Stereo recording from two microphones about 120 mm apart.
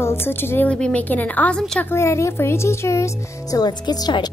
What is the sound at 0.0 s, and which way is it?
A woman's voice, 20° left (ahead or behind).